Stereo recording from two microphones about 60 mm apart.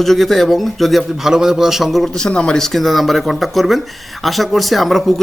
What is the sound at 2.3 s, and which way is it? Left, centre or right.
A man's voice, centre.